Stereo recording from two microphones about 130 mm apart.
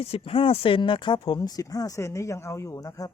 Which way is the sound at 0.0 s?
50° left (ahead or behind).